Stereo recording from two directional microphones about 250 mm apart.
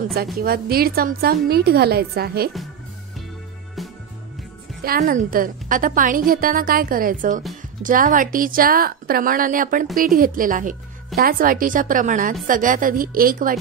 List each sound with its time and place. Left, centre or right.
0.4 s a woman's voice: right
4.8 s a woman's voice: right